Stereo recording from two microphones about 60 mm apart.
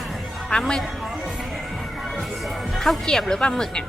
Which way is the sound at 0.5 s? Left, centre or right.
Centre.